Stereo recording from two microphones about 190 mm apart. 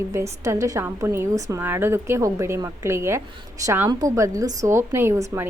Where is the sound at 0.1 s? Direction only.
15° right (ahead or behind).